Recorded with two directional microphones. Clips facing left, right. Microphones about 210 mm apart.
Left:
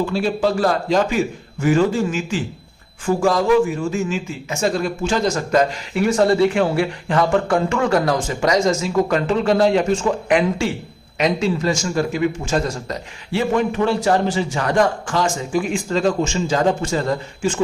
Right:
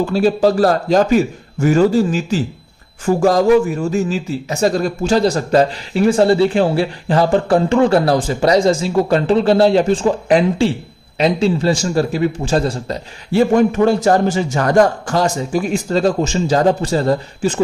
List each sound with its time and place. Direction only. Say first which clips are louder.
0.0 s a man's voice: right 5 dB; 40° right (ahead or behind)
13.5 s a man's voice: right 4 dB; 45° right (ahead or behind)